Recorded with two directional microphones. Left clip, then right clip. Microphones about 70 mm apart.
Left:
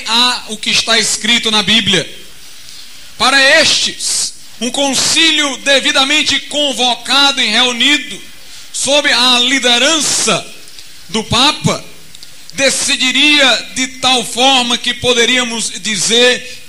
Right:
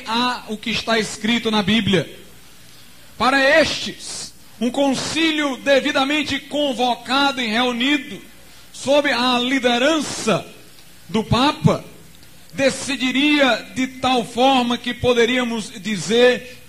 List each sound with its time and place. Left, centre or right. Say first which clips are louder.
0.0 s a man's voice: left 9 dB; left
3.2 s a man's voice: left 6 dB; left